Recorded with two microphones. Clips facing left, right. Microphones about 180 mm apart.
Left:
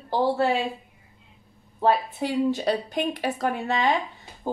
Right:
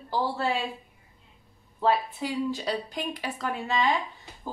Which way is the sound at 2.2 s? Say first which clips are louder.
Left 6 dB; 50° left (ahead or behind).